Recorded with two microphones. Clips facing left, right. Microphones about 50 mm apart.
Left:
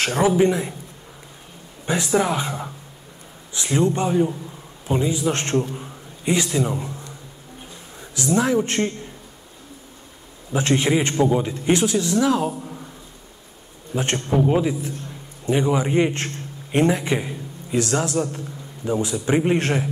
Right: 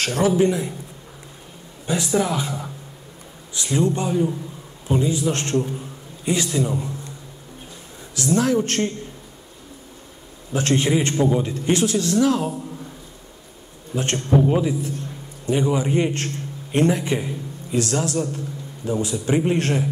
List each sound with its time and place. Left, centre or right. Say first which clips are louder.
0.0 s a man's voice: left 1 dB; left
2.0 s a man's voice: left 1 dB; centre
8.1 s a man's voice: even; left
10.5 s a man's voice: even; left
11.1 s a man's voice: left 1 dB; centre
11.6 s a man's voice: even; left
13.9 s a man's voice: right 1 dB; left
17.2 s a sound: right 2 dB; centre
18.0 s a man's voice: even; left